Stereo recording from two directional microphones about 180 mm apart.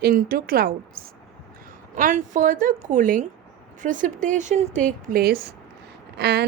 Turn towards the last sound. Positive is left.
turn(degrees=-65)  # may be behind; listen again after turning